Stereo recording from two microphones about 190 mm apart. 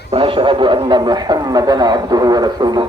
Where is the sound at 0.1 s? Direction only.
30° right (ahead or behind).